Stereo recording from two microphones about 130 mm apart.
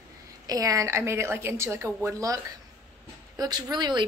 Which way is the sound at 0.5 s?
25° right (ahead or behind).